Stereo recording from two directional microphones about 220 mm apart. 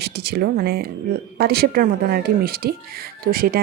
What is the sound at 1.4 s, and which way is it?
Speech, 45° right (ahead or behind).